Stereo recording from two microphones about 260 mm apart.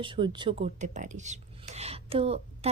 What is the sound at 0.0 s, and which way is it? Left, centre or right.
Speech, centre.